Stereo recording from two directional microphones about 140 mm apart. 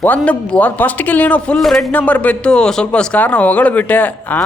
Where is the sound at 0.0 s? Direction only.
10° left (ahead or behind).